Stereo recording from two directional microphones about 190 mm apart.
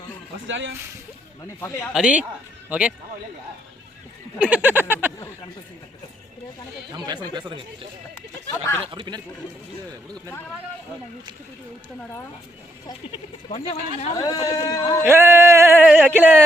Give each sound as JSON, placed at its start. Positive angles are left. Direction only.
{"t": 0.4, "sound": "speech", "side_deg": -75}
{"t": 1.9, "sound": "speech", "side_deg": -5}
{"t": 4.4, "sound": "a sound", "side_deg": -5}
{"t": 6.9, "sound": "speech", "side_deg": -20}
{"t": 13.1, "sound": "speech", "side_deg": 25}
{"t": 15.0, "sound": "a sound", "side_deg": -10}